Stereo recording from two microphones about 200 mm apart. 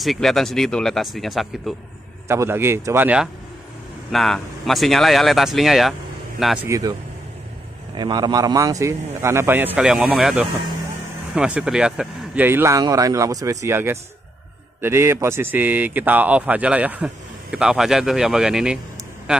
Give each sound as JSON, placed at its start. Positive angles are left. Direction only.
{"t": 0.0, "sound": "speech", "side_deg": 0}
{"t": 2.2, "sound": "a man's voice", "side_deg": -15}
{"t": 6.7, "sound": "a man's voice", "side_deg": -15}